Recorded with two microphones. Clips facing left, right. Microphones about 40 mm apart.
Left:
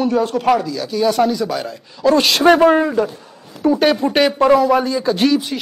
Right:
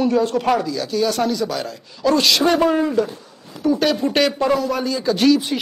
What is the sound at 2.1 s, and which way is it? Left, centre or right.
Speech, left.